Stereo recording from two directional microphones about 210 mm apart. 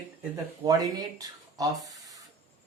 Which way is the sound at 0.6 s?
15° right (ahead or behind).